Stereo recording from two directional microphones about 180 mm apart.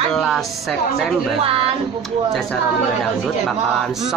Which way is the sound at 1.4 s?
30° right (ahead or behind).